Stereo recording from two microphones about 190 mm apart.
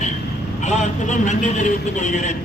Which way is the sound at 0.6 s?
40° left (ahead or behind).